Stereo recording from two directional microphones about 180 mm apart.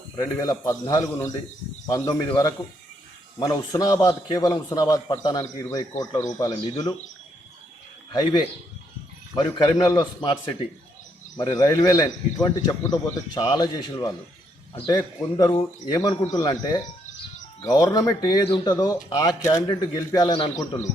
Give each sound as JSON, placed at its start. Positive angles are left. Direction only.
{"t": 0.2, "sound": "a man's voice", "side_deg": 20}
{"t": 8.1, "sound": "a man's voice", "side_deg": 25}
{"t": 11.3, "sound": "a man's voice", "side_deg": 20}